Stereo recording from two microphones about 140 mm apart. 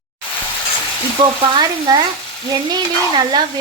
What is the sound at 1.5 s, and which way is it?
Sizzle, 30° right (ahead or behind).